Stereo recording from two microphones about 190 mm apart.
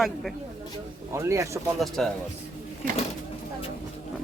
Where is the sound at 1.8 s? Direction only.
Centre (ahead or behind).